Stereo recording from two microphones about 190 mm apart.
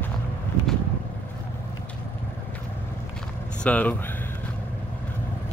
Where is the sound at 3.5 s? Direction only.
5° left (ahead or behind).